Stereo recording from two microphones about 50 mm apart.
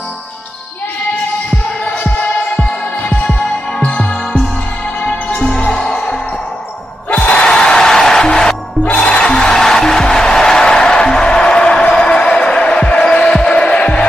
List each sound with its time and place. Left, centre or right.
1.9 s music: centre
7.1 s music: left